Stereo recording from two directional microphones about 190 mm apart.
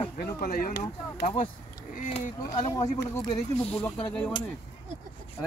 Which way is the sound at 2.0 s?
40° left (ahead or behind).